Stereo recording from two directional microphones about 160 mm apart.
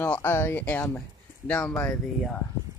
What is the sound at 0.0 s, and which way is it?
Speech, 10° left (ahead or behind).